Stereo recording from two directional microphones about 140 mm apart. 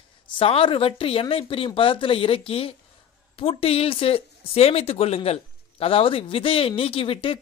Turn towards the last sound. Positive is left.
turn(degrees=40)  # may be behind; listen again after turning